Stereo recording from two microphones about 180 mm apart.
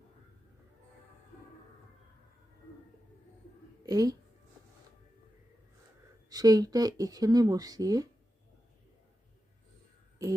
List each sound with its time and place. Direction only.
3.8 s speech: 20° right (ahead or behind)
6.3 s speech: 20° right (ahead or behind)